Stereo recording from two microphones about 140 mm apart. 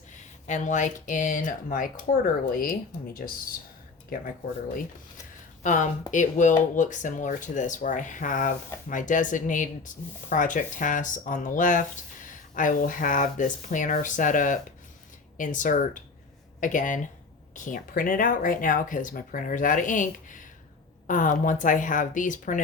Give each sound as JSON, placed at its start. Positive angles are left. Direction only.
{"t": 0.1, "sound": "speech", "side_deg": 60}
{"t": 5.6, "sound": "speech", "side_deg": 60}